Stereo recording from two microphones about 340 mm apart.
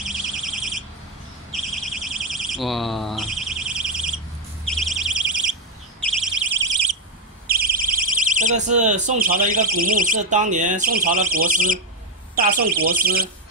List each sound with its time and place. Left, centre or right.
0.0 s alarm: centre
1.5 s bird: centre
4.6 s a sound: centre
7.4 s speech: right